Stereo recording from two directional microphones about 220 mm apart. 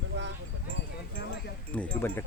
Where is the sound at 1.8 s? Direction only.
10° left (ahead or behind).